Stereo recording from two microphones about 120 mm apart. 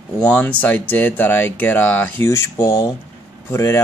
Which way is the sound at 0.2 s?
15° left (ahead or behind).